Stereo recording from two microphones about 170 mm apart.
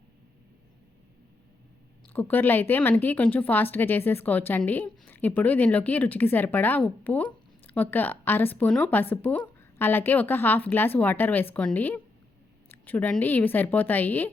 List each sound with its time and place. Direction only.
2.1 s a woman's voice: 10° left (ahead or behind)